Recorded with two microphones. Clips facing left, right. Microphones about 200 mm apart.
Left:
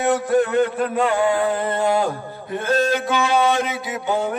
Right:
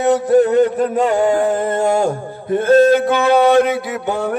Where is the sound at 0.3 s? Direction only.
40° right (ahead or behind).